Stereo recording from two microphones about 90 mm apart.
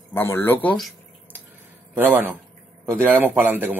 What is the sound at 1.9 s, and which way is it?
A man's voice, 20° right (ahead or behind).